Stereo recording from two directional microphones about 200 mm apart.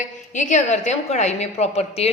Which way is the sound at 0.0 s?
40° left (ahead or behind).